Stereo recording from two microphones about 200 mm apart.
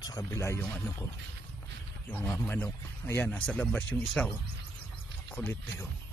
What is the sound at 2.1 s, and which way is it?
Speech, 10° left (ahead or behind).